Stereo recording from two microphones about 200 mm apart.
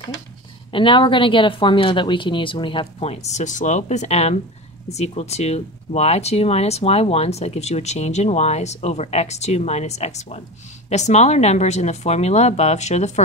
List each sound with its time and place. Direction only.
0.7 s a woman's voice: 25° left (ahead or behind)